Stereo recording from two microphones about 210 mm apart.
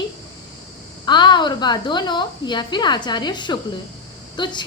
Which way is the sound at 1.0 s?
20° left (ahead or behind).